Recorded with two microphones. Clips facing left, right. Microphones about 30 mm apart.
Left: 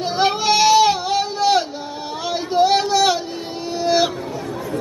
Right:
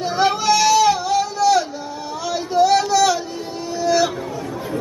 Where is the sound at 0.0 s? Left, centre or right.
Left.